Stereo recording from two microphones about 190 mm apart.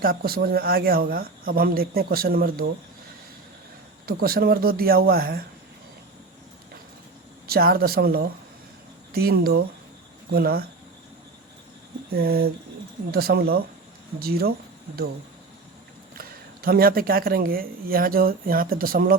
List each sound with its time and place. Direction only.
0.0 s speech: 50° right (ahead or behind)
4.0 s speech: 50° right (ahead or behind)
7.4 s speech: 55° right (ahead or behind)
12.1 s speech: 55° right (ahead or behind)
16.1 s speech: 50° right (ahead or behind)